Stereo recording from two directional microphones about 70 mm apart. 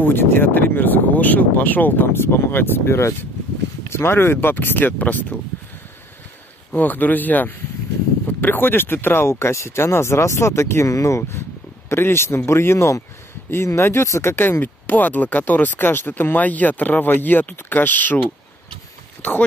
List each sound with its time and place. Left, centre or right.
0.0 s speech: left
6.7 s speech: left
14.3 s speech: left